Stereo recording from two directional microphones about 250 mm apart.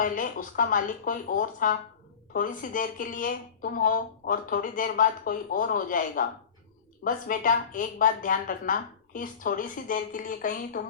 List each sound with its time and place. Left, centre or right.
0.0 s speech: left